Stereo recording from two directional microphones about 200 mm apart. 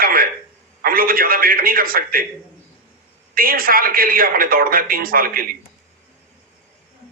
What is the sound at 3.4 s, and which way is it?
Speech, 45° right (ahead or behind).